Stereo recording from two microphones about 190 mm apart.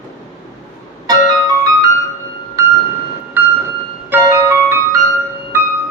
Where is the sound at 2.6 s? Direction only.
15° right (ahead or behind).